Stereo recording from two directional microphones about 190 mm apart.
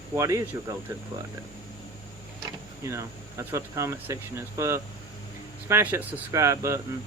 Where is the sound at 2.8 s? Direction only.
15° right (ahead or behind).